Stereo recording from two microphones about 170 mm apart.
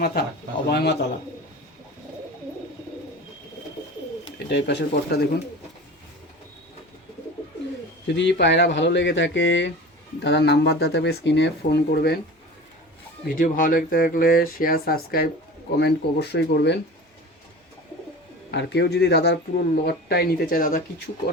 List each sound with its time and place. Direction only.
0.0 s speech: 65° left (ahead or behind)
4.4 s speech: 80° left
8.0 s speech: 90° left; by 12.2 s 65° left (ahead or behind)
13.2 s speech: 55° left (ahead or behind)
15.8 s speech: 75° left (ahead or behind)
18.5 s speech: 85° left; by 20.8 s 55° left (ahead or behind)